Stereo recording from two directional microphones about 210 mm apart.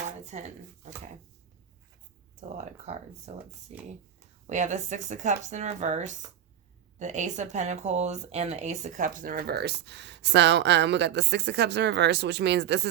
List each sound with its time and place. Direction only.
0.3 s speech: 35° right (ahead or behind)
2.4 s speech: 35° right (ahead or behind); by 12.9 s 55° right (ahead or behind)